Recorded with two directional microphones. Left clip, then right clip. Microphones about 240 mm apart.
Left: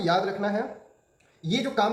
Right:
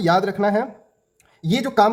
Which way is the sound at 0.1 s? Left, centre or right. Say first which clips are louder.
Right 7 dB; right.